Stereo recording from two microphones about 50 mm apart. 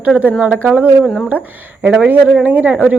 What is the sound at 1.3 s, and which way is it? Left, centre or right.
Speech, right.